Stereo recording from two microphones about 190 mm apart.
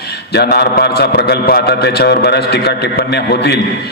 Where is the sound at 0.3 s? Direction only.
60° left (ahead or behind).